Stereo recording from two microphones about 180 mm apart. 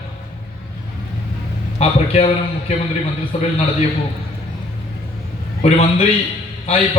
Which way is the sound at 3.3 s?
35° left (ahead or behind).